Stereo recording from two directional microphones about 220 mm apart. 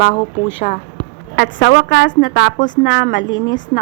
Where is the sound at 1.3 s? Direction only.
55° left (ahead or behind).